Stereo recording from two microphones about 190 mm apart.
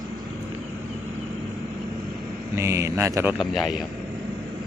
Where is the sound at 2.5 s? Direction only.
15° right (ahead or behind).